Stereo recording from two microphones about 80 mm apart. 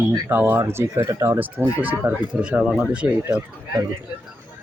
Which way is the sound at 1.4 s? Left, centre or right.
Right.